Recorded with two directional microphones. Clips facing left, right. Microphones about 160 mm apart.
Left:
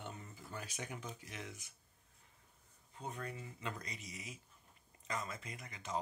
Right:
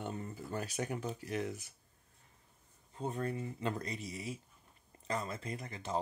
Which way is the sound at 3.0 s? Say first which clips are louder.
Right 8 dB; 35° right (ahead or behind).